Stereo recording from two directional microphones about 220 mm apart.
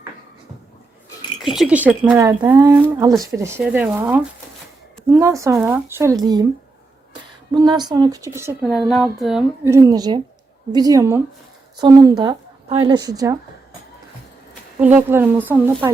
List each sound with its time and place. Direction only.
1.4 s speech: centre (ahead or behind); by 6.4 s 15° right (ahead or behind)
7.5 s speech: 20° right (ahead or behind)
8.7 s speech: centre (ahead or behind)
9.6 s speech: 15° right (ahead or behind)
14.8 s speech: 5° right (ahead or behind)